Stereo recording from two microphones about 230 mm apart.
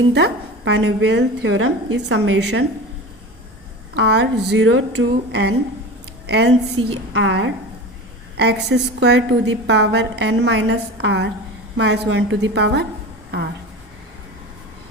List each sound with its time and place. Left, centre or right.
0.1 s a woman's voice: right
3.9 s a woman's voice: right
6.8 s a woman's voice: right
7.1 s a woman's voice: right